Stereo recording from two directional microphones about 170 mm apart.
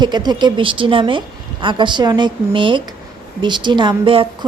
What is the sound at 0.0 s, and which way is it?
A woman's voice, 25° right (ahead or behind).